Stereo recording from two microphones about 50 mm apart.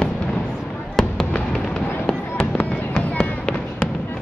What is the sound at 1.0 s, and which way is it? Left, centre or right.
Fireworks, centre.